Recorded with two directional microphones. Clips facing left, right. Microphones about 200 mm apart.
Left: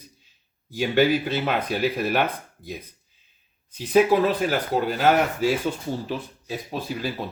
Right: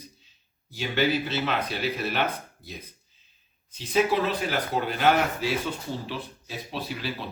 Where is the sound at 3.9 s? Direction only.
45° left (ahead or behind).